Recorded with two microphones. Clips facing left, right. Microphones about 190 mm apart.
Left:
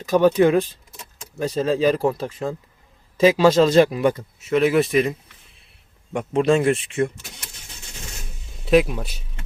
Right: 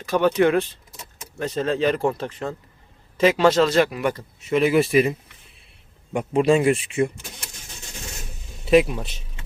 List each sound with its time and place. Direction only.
0.0 s speech: 15° left (ahead or behind)
3.8 s speech: 25° left (ahead or behind)
4.1 s a man's voice: centre (ahead or behind)
6.1 s a man's voice: 5° right (ahead or behind)
8.6 s a man's voice: centre (ahead or behind)